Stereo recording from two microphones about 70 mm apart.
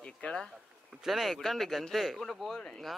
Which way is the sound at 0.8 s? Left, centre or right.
Centre.